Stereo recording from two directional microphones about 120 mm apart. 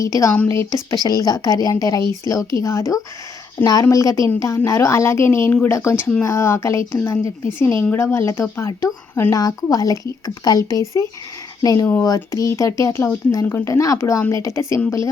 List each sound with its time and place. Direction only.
0.0 s a woman's voice: 25° left (ahead or behind)